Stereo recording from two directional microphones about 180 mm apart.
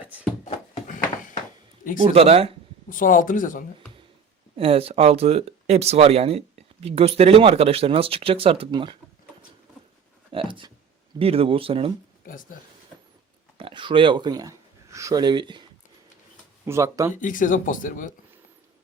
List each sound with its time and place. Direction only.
0.0 s a sound: 10° right (ahead or behind)
0.4 s a sound: 40° left (ahead or behind)
2.0 s speech: 35° right (ahead or behind)
2.9 s speech: 50° left (ahead or behind)
4.5 s speech: 30° right (ahead or behind)
10.3 s speech: 25° right (ahead or behind)
12.2 s speech: 50° left (ahead or behind)
13.6 s speech: 30° right (ahead or behind)
16.6 s speech: 15° right (ahead or behind)
17.2 s speech: 45° left (ahead or behind)